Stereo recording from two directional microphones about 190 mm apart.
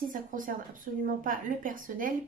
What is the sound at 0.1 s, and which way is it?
Speech, 45° right (ahead or behind).